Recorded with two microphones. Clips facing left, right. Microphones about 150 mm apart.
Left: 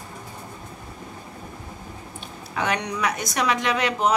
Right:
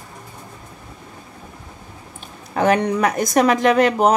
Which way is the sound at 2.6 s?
50° right (ahead or behind).